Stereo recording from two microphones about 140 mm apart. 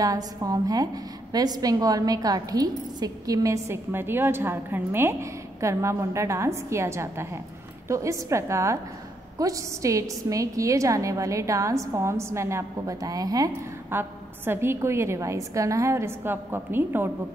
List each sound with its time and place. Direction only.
0.0 s a woman's voice: 25° right (ahead or behind)